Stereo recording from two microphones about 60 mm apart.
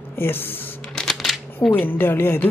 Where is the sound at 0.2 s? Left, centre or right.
Left.